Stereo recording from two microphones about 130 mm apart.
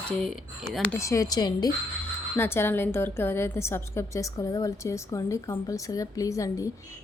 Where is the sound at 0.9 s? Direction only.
25° left (ahead or behind).